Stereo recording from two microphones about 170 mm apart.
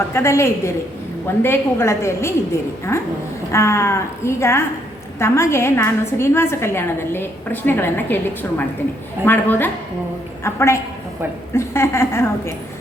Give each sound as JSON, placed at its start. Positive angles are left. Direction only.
{"t": 0.1, "sound": "a woman's voice", "side_deg": 15}